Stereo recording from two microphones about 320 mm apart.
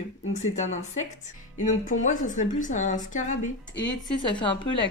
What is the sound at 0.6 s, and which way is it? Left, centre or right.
A woman's voice, left.